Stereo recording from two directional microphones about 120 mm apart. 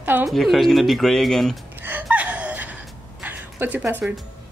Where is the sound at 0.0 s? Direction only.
15° right (ahead or behind).